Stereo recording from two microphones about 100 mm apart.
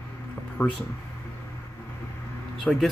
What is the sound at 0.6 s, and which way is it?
Speech, 10° left (ahead or behind).